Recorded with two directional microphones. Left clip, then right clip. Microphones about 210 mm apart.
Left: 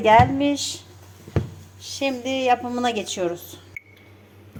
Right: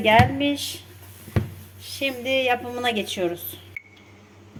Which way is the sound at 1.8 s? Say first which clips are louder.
Even; centre (ahead or behind).